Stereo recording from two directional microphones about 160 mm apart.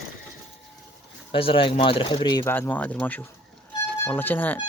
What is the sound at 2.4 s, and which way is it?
Speech, 15° left (ahead or behind).